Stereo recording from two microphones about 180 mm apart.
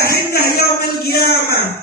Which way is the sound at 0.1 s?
60° left (ahead or behind).